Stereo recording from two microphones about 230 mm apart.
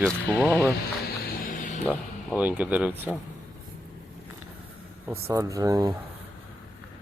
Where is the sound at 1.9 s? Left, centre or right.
Centre.